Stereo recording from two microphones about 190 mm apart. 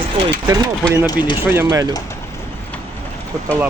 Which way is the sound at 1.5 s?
15° right (ahead or behind).